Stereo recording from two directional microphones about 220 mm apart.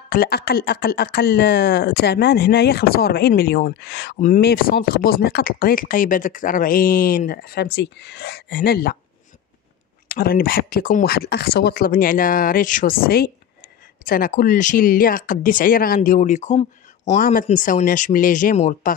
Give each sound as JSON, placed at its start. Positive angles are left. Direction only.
{"t": 0.1, "sound": "speech", "side_deg": 45}
{"t": 10.0, "sound": "speech", "side_deg": 40}